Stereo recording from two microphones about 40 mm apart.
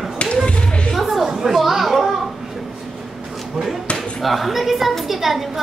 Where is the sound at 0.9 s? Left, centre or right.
Centre.